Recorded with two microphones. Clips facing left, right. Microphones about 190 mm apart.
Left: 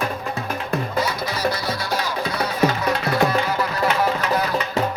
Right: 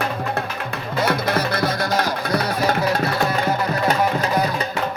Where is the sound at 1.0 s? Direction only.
55° right (ahead or behind); by 3.0 s 40° right (ahead or behind).